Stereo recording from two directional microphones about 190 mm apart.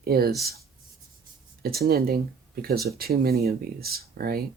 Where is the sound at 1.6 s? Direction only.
55° right (ahead or behind).